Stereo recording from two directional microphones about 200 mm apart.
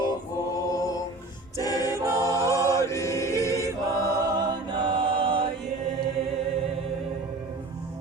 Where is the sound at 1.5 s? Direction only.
20° left (ahead or behind).